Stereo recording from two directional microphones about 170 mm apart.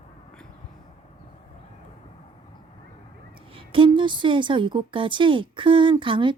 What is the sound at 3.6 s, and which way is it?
A woman's voice, 30° right (ahead or behind).